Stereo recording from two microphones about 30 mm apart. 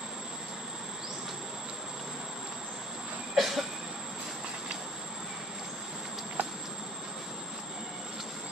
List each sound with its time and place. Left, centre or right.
3.3 s train: centre
6.4 s train: right